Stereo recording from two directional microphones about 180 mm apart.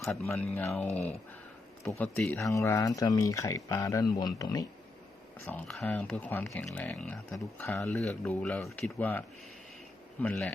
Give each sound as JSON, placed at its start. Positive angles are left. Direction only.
{"t": 0.0, "sound": "speech", "side_deg": 0}
{"t": 0.5, "sound": "speech", "side_deg": 15}
{"t": 5.5, "sound": "speech", "side_deg": 5}